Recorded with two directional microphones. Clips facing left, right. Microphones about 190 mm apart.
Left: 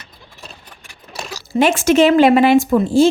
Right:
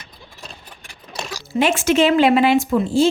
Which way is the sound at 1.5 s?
40° left (ahead or behind).